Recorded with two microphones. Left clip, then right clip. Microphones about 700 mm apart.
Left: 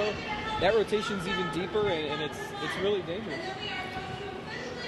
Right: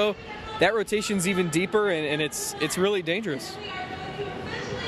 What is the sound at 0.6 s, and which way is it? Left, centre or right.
Speech, right.